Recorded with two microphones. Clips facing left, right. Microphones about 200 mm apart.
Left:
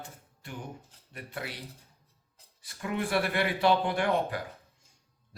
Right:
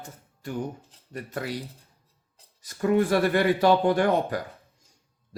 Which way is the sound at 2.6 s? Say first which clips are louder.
Right 11 dB; 40° right (ahead or behind).